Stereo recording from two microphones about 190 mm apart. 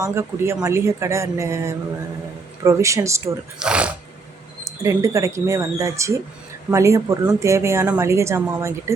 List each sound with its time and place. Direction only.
0.0 s speech: 15° right (ahead or behind)
4.6 s speech: 15° right (ahead or behind)